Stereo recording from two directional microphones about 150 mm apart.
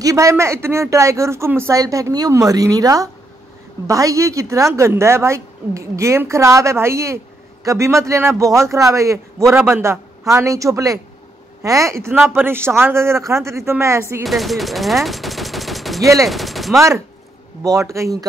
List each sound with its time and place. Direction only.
0.0 s a man's voice: 20° right (ahead or behind)
14.2 s speech: centre (ahead or behind)
16.0 s a man's voice: 20° right (ahead or behind)
16.3 s speech: centre (ahead or behind)
17.6 s a man's voice: 20° right (ahead or behind)